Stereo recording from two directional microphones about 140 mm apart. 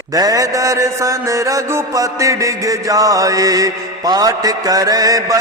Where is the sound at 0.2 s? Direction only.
25° right (ahead or behind).